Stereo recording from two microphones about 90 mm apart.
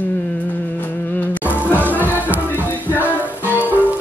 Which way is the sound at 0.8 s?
20° left (ahead or behind).